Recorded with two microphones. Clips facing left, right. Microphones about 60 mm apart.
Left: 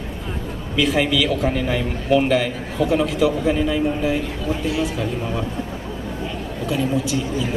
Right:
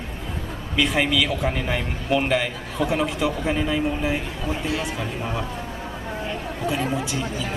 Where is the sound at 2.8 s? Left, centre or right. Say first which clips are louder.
Left 5 dB; centre.